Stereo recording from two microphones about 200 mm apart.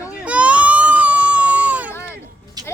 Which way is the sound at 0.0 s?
5° right (ahead or behind).